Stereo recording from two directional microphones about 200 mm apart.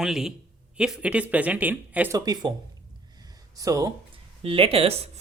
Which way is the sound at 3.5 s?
15° right (ahead or behind).